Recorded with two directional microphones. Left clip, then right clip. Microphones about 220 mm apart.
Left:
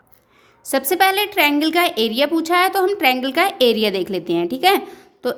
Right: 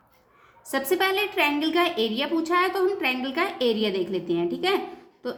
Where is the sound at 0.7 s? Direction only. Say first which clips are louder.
Left 7 dB; 45° left (ahead or behind).